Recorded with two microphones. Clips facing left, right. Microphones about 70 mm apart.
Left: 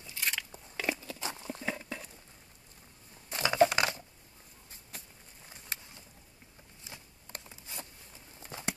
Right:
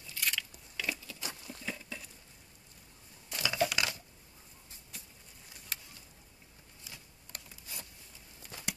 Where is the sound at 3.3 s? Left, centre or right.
Left.